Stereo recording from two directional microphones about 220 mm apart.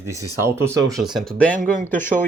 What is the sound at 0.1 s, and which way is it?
Speech, 15° right (ahead or behind).